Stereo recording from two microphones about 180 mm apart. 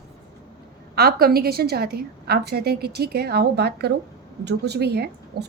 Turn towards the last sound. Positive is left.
turn(degrees=-65)  # may be behind; listen again after turning